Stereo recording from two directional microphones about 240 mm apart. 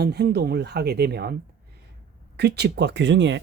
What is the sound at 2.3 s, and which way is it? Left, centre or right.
Speech, right.